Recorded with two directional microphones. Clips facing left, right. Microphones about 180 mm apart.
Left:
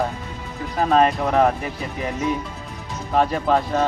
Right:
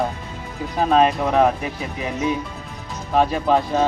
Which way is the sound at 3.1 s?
Centre (ahead or behind).